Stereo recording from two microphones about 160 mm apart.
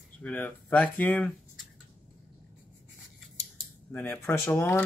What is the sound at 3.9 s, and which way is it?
Speech, 10° left (ahead or behind).